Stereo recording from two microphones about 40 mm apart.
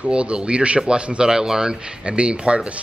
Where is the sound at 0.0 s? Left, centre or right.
Right.